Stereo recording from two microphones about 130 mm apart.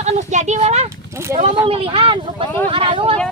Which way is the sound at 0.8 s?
20° right (ahead or behind).